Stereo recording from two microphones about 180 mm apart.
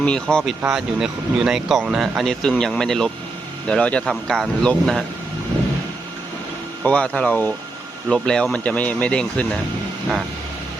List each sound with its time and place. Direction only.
0.0 s speech: 5° left (ahead or behind)
6.8 s speech: 5° left (ahead or behind)